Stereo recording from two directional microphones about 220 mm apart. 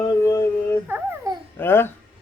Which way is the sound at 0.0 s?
15° left (ahead or behind).